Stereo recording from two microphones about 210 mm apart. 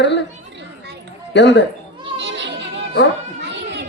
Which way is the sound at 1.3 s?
55° left (ahead or behind).